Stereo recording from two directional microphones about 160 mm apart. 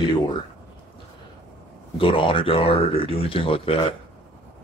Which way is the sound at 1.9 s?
35° left (ahead or behind).